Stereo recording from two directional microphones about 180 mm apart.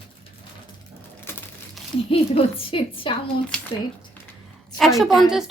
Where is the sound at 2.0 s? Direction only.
30° left (ahead or behind).